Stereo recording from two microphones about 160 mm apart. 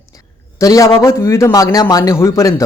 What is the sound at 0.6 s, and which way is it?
A man's voice, 20° left (ahead or behind).